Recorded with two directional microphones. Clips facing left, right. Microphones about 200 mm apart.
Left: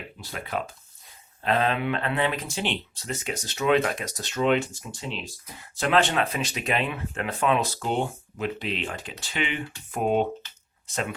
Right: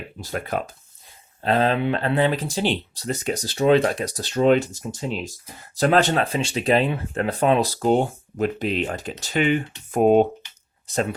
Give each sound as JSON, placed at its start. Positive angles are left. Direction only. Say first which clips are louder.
{"t": 0.2, "sound": "speech", "louder": "right 5 dB", "side_deg": -45}
{"t": 1.4, "sound": "speech", "louder": "right 4 dB", "side_deg": -30}
{"t": 10.4, "sound": "a sound", "louder": "even", "side_deg": -15}
{"t": 10.8, "sound": "speech", "louder": "right 7 dB", "side_deg": -35}